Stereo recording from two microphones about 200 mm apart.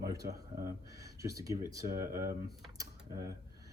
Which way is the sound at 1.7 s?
15° right (ahead or behind).